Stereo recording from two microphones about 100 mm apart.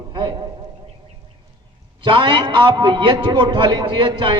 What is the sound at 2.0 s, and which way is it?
A man's voice, 55° right (ahead or behind).